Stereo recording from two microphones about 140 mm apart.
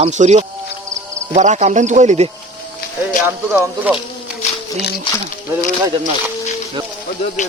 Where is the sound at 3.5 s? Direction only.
10° right (ahead or behind).